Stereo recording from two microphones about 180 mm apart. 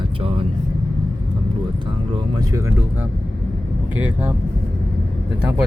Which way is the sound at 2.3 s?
15° right (ahead or behind).